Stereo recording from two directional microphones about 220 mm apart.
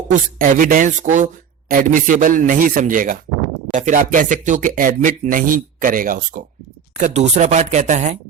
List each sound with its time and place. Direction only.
0.1 s speech: 35° right (ahead or behind)